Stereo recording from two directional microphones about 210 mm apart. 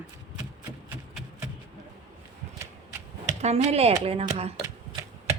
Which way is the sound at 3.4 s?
30° right (ahead or behind).